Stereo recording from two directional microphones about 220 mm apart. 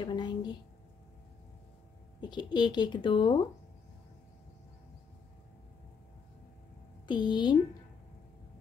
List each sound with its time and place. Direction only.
0.0 s a woman's voice: 20° left (ahead or behind)
2.2 s speech: 20° left (ahead or behind)
7.1 s speech: 20° left (ahead or behind)